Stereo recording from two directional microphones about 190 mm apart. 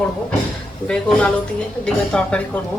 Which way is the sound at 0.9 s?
5° left (ahead or behind).